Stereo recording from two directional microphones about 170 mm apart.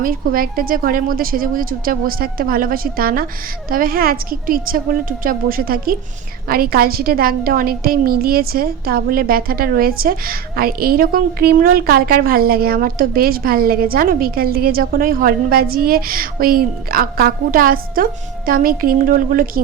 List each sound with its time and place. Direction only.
0.0 s a woman's voice: 55° right (ahead or behind)